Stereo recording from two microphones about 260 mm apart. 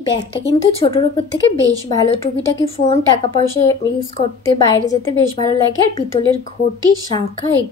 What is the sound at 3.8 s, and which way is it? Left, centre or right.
Speech, centre.